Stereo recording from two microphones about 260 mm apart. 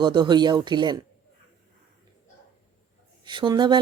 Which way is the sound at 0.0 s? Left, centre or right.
Centre.